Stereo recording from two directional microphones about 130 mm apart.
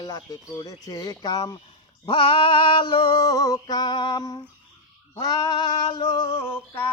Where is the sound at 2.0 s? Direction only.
40° left (ahead or behind).